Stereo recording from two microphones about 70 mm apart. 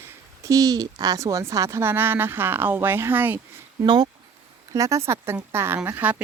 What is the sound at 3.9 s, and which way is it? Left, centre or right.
Speech, right.